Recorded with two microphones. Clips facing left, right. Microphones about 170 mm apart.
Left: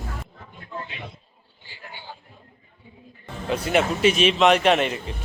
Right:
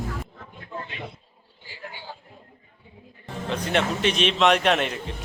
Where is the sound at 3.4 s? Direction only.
10° left (ahead or behind).